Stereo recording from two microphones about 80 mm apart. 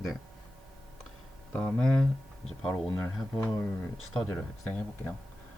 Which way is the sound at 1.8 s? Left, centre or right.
Centre.